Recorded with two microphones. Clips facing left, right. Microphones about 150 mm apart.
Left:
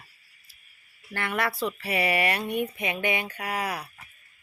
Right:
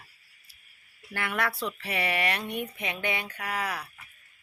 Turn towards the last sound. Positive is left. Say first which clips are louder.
# left 2 dB
turn(degrees=10)  # may be behind; listen again after turning